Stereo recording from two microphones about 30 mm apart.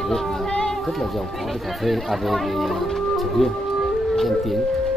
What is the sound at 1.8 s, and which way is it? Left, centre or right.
Speech, centre.